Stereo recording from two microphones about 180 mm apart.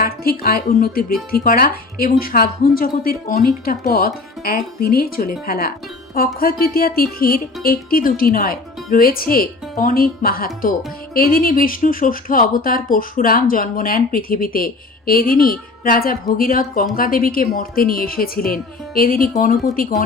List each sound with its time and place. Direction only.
0.0 s speech: 55° left (ahead or behind)